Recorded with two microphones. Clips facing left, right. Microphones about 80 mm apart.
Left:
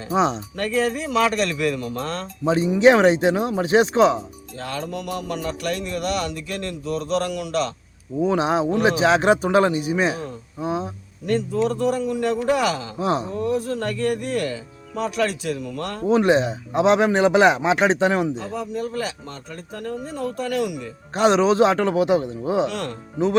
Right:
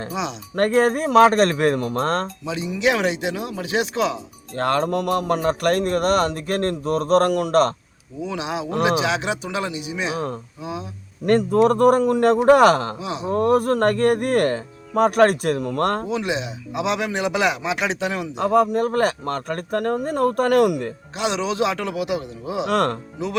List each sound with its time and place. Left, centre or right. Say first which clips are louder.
0.1 s a man's voice: left 10 dB; left
0.5 s speech: right 5 dB; right
2.4 s a man's voice: left 7 dB; left
4.5 s speech: right 9 dB; right
8.2 s a man's voice: left 7 dB; left
11.3 s speech: right 5 dB; right
13.0 s a man's voice: left 7 dB; left
13.2 s speech: right 6 dB; right
16.0 s a man's voice: left 7 dB; left
18.3 s speech: right 10 dB; right
21.2 s a man's voice: left 6 dB; left
22.6 s speech: right 6 dB; right